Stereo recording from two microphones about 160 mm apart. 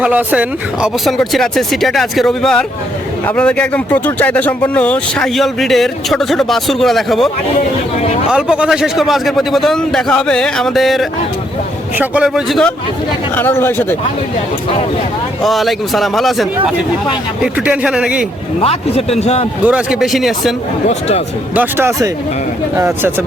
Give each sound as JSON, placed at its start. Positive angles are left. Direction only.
{"t": 0.0, "sound": "speech", "side_deg": -10}
{"t": 8.3, "sound": "speech", "side_deg": -5}
{"t": 13.3, "sound": "speech", "side_deg": 15}
{"t": 15.4, "sound": "speech", "side_deg": 0}
{"t": 18.6, "sound": "a man's voice", "side_deg": 40}
{"t": 19.6, "sound": "speech", "side_deg": -5}
{"t": 21.5, "sound": "speech", "side_deg": -10}